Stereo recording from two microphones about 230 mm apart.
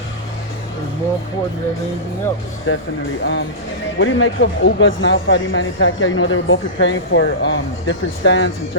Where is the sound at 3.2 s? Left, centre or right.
Left.